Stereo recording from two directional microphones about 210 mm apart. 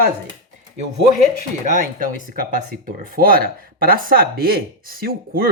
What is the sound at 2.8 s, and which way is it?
Speech, 45° right (ahead or behind).